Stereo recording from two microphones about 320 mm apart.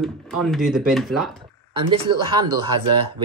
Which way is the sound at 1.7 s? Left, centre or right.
Centre.